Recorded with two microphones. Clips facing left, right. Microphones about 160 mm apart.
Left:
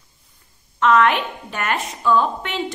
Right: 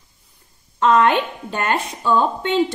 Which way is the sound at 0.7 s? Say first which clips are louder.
Right 1 dB; 30° right (ahead or behind).